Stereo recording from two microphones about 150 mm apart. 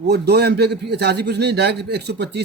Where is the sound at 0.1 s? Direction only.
90° right.